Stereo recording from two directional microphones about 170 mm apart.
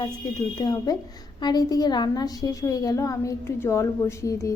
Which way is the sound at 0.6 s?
20° left (ahead or behind).